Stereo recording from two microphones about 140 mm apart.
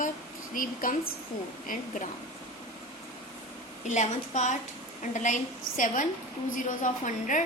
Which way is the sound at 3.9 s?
60° left (ahead or behind).